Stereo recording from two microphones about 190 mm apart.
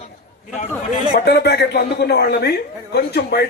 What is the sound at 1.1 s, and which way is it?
A man's voice, 60° left (ahead or behind).